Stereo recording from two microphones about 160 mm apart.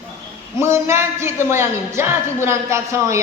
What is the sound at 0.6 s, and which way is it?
Speech, 15° right (ahead or behind).